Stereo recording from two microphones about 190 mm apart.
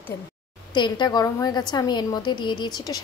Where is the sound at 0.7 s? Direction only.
25° left (ahead or behind).